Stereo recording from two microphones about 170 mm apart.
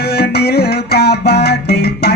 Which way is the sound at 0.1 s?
70° left (ahead or behind).